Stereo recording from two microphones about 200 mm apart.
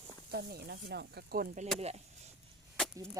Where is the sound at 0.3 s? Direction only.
50° right (ahead or behind).